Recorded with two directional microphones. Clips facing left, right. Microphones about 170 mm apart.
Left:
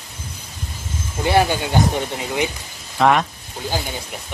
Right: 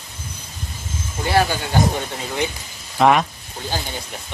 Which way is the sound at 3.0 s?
5° right (ahead or behind).